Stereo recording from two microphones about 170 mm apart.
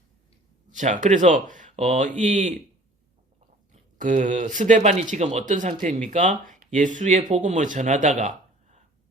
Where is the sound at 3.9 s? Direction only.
45° right (ahead or behind).